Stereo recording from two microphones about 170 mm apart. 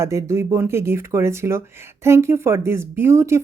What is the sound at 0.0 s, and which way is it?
Speech, 15° right (ahead or behind).